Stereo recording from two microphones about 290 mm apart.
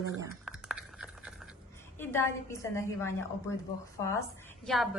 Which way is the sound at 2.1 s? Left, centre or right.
Centre.